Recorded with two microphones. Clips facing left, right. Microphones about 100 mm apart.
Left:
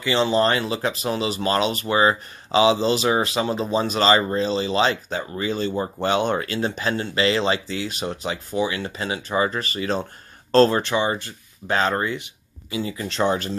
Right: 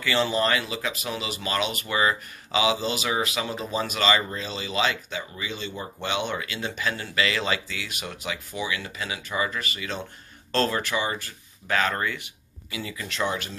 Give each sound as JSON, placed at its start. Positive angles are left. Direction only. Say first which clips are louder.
{"t": 0.0, "sound": "speech", "louder": "left 5 dB", "side_deg": 25}